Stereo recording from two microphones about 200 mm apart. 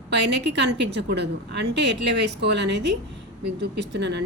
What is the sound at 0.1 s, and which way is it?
Speech, 60° right (ahead or behind).